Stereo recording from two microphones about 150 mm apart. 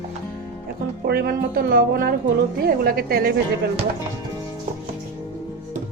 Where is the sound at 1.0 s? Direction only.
85° right.